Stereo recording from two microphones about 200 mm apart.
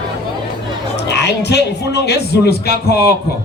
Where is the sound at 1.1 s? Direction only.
55° left (ahead or behind).